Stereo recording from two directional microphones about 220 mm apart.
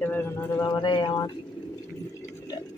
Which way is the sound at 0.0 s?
10° left (ahead or behind).